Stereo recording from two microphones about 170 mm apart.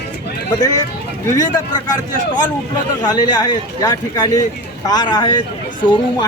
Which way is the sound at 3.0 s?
25° left (ahead or behind).